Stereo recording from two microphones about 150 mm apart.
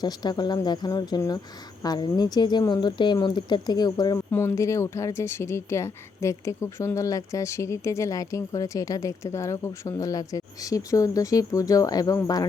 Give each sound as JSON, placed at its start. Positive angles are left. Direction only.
{"t": 0.0, "sound": "speech", "side_deg": 30}